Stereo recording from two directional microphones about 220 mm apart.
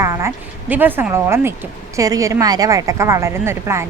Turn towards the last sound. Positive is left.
turn(degrees=-10)  # may be behind; listen again after turning